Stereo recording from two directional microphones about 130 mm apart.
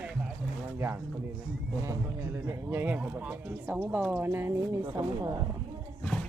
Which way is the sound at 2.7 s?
15° right (ahead or behind).